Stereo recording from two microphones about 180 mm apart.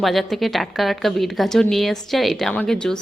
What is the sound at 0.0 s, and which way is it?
A woman's voice, centre (ahead or behind).